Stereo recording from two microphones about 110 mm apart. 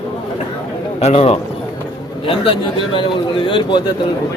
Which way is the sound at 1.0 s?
70° left (ahead or behind).